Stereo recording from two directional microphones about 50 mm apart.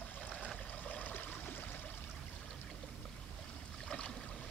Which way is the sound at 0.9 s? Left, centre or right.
Left.